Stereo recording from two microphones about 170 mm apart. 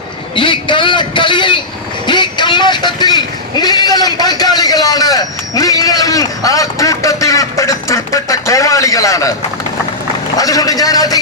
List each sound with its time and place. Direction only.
0.3 s a man's voice: 30° left (ahead or behind)
10.3 s a man's voice: 20° left (ahead or behind)